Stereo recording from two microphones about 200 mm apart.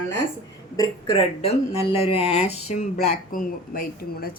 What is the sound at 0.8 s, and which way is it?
Speech, 25° left (ahead or behind).